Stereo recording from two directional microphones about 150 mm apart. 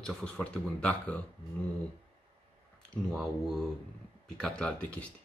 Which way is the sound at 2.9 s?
Centre (ahead or behind).